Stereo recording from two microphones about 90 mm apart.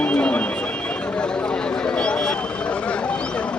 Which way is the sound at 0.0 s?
15° left (ahead or behind).